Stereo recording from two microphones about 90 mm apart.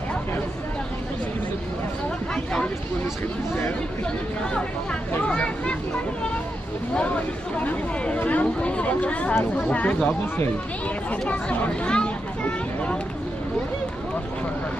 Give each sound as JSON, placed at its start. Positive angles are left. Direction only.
{"t": 2.3, "sound": "a sound", "side_deg": 10}
{"t": 5.2, "sound": "speech", "side_deg": 10}
{"t": 7.6, "sound": "speech", "side_deg": 15}